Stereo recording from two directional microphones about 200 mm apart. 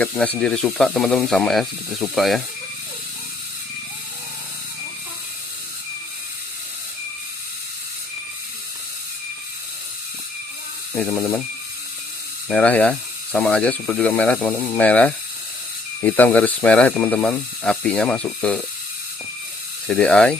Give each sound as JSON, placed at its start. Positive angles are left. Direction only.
{"t": 0.0, "sound": "speech", "side_deg": 5}
{"t": 10.9, "sound": "speech", "side_deg": 10}
{"t": 12.5, "sound": "speech", "side_deg": 5}
{"t": 19.9, "sound": "speech", "side_deg": 5}